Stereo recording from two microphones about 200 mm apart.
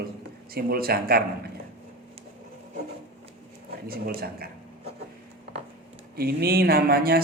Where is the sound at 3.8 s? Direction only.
50° right (ahead or behind).